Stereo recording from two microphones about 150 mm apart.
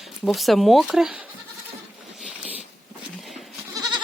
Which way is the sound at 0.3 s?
Centre (ahead or behind).